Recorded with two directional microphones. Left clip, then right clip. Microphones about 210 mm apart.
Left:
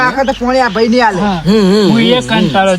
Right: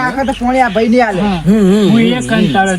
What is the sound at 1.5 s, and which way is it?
Speech, 25° left (ahead or behind).